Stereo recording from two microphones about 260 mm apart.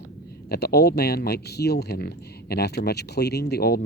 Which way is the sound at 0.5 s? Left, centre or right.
Left.